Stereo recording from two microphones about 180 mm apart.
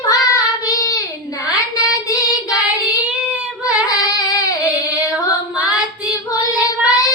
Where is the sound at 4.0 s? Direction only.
20° left (ahead or behind).